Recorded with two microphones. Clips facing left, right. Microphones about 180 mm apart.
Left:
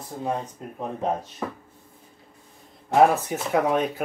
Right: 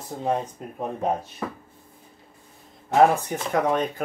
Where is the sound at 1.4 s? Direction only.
Centre (ahead or behind).